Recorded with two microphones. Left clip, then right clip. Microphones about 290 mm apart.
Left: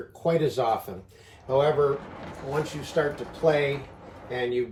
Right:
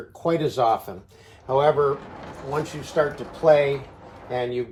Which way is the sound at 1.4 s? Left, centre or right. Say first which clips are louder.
Right 3 dB; right.